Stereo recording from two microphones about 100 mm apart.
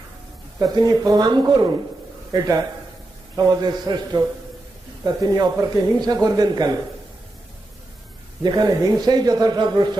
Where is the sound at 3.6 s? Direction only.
45° right (ahead or behind).